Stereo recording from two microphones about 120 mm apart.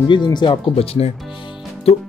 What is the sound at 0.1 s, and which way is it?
Speech, 40° left (ahead or behind).